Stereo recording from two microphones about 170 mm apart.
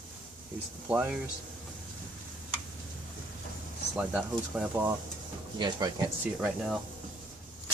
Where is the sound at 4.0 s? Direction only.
5° right (ahead or behind).